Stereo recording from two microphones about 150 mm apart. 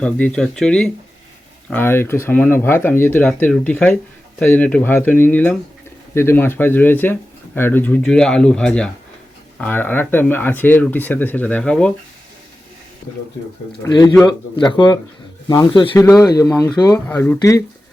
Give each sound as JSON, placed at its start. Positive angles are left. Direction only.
{"t": 0.0, "sound": "speech", "side_deg": 5}
{"t": 1.7, "sound": "speech", "side_deg": 15}
{"t": 13.8, "sound": "speech", "side_deg": 25}
{"t": 16.0, "sound": "speech", "side_deg": 20}